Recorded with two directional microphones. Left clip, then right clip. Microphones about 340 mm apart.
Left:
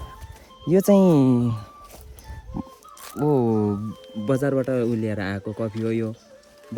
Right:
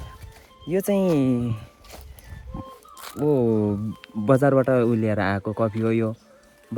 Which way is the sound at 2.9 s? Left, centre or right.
Right.